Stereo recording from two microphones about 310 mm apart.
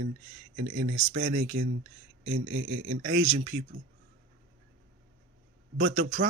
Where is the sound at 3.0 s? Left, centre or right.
Right.